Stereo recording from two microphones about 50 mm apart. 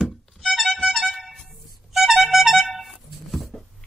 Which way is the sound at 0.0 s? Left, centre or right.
Centre.